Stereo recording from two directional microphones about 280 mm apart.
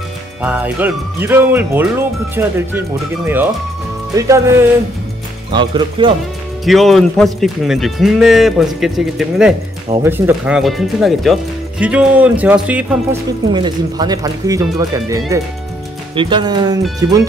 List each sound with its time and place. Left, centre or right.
0.4 s speech: centre
4.1 s speech: centre
6.6 s speech: centre
13.5 s speech: centre